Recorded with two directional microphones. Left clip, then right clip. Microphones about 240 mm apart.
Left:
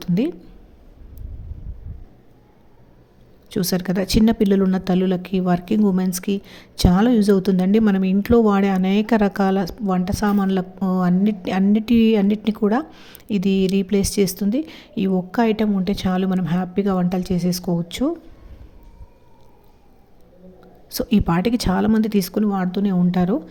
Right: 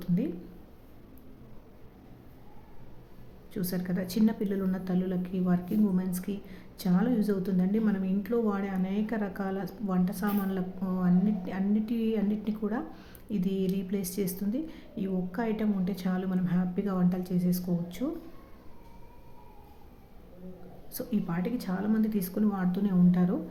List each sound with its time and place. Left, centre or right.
0.0 s a sound: left
3.5 s speech: left
20.9 s speech: left